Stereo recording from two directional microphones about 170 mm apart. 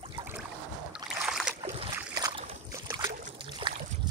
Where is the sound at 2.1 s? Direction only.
25° right (ahead or behind).